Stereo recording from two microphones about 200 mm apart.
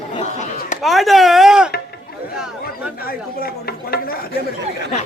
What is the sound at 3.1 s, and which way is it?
Speech, 50° left (ahead or behind).